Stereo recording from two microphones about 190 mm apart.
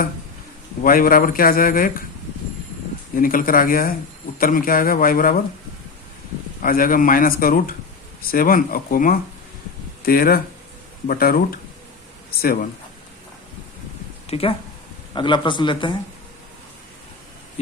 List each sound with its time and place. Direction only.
0.8 s speech: 50° left (ahead or behind)
3.2 s speech: 50° left (ahead or behind)
6.6 s speech: 45° left (ahead or behind)
14.3 s speech: 30° left (ahead or behind)